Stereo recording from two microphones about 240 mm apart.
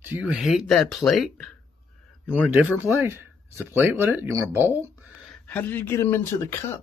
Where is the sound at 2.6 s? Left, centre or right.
Centre.